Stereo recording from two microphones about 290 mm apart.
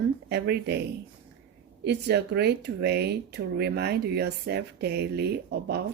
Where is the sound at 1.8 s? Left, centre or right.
Right.